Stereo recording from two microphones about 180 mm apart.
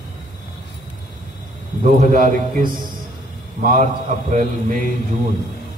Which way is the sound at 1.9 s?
50° right (ahead or behind).